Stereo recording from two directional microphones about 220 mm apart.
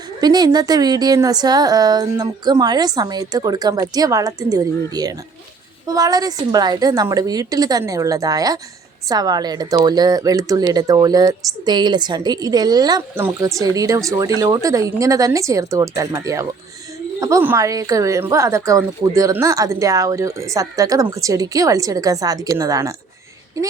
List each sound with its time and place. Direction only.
0.2 s a woman's voice: 20° right (ahead or behind)